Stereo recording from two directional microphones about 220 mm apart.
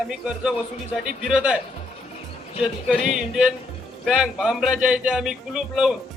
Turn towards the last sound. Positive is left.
turn(degrees=-5)  # may be behind; listen again after turning